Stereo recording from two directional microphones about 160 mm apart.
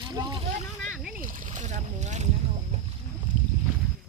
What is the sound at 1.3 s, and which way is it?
Boat, 55° right (ahead or behind).